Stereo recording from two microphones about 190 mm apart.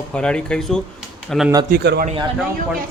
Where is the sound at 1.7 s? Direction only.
55° right (ahead or behind).